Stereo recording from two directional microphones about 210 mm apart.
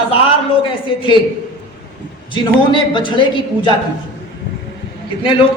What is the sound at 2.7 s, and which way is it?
Speech, 25° left (ahead or behind).